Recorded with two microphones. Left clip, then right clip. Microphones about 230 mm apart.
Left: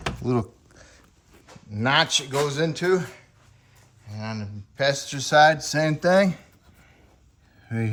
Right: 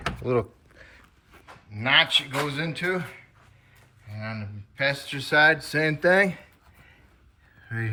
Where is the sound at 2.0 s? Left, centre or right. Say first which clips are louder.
Left 1 dB; centre.